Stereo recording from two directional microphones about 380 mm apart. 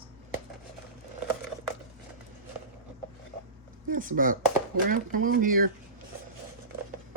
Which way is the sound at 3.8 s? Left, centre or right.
Right.